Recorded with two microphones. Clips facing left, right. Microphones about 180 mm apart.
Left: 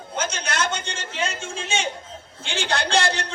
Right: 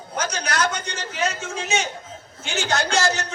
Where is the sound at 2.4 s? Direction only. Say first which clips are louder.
Right 2 dB; 30° left (ahead or behind).